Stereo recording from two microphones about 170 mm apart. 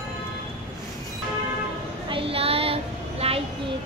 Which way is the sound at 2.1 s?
35° right (ahead or behind).